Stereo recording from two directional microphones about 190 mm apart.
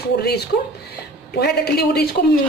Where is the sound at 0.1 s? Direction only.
60° left (ahead or behind).